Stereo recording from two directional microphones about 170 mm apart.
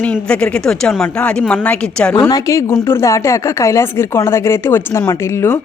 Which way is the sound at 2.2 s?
20° left (ahead or behind).